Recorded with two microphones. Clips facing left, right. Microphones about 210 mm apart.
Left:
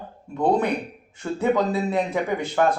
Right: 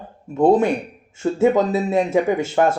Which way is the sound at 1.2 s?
30° right (ahead or behind).